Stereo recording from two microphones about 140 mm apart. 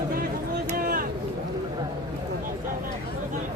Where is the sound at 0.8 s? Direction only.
85° right.